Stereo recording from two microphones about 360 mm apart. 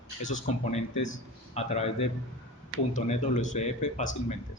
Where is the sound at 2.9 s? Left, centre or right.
Left.